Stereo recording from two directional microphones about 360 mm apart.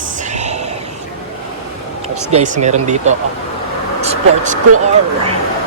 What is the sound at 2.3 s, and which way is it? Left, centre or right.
Speech, centre.